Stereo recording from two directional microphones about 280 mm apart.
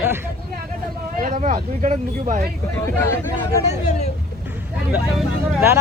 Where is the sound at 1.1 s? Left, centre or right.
Right.